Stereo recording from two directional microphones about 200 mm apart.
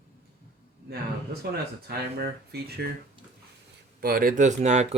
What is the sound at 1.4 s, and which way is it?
Speech, 50° right (ahead or behind).